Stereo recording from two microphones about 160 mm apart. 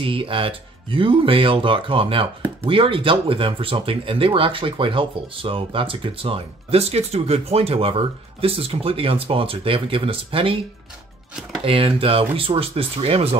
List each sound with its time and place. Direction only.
0.0 s speech: 30° right (ahead or behind)
11.6 s speech: 35° right (ahead or behind)